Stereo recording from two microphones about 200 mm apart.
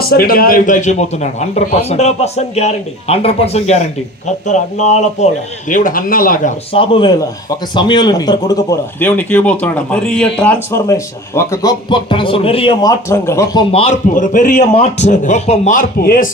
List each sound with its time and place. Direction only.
0.0 s a man's voice: 50° left (ahead or behind)
6.7 s a man's voice: 25° left (ahead or behind)
13.1 s a man's voice: 15° left (ahead or behind); by 16.3 s 45° left (ahead or behind)